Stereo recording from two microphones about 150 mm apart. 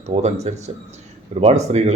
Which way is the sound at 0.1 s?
45° right (ahead or behind).